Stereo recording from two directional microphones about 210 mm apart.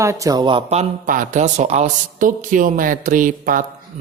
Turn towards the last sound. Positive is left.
turn(degrees=-40)  # may be behind; listen again after turning